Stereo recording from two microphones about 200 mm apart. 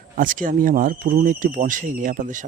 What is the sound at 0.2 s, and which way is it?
Speech, 40° right (ahead or behind).